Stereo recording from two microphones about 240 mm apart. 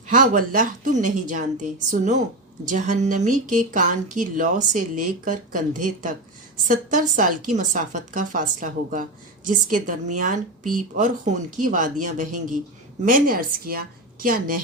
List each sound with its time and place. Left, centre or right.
0.1 s speech: right